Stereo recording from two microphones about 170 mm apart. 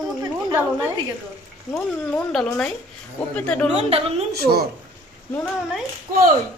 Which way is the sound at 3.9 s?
35° right (ahead or behind).